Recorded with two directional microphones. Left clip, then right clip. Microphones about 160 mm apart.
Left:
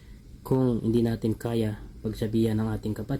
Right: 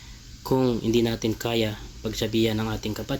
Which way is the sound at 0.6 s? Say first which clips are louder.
Right 3 dB; 15° left (ahead or behind).